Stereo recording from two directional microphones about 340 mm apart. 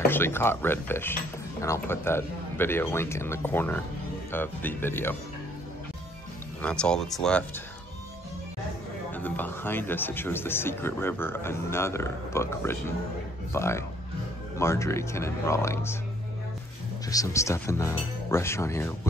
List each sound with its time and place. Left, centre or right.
0.1 s speech: centre
6.6 s speech: centre
9.1 s speech: centre
17.1 s speech: centre